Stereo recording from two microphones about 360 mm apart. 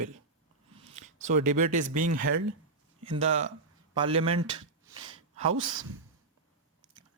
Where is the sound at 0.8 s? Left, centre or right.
Centre.